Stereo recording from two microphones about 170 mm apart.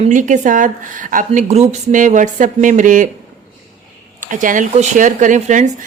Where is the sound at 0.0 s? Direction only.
50° right (ahead or behind).